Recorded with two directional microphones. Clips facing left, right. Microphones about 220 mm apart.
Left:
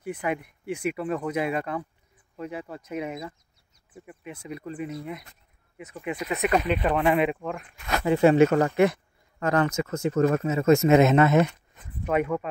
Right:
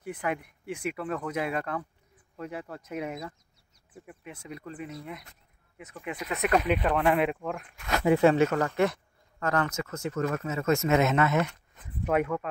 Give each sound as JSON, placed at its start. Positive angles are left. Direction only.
{"t": 0.2, "sound": "speech", "side_deg": 5}
{"t": 6.4, "sound": "speech", "side_deg": 0}
{"t": 8.5, "sound": "speech", "side_deg": 25}
{"t": 8.7, "sound": "speech", "side_deg": 10}